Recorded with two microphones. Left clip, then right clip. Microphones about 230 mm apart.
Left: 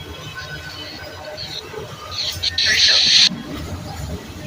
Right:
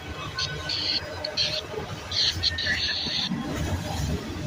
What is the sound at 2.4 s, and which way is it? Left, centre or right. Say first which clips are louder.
Music: left 10 dB; left.